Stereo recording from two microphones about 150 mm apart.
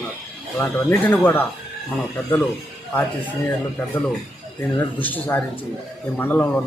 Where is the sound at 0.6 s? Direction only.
15° left (ahead or behind).